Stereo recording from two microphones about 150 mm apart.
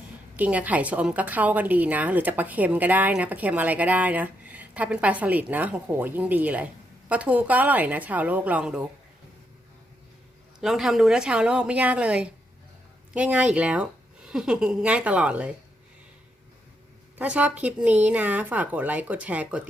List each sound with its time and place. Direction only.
0.3 s a woman's voice: 10° right (ahead or behind)
10.6 s a woman's voice: centre (ahead or behind)
17.2 s a woman's voice: 10° right (ahead or behind)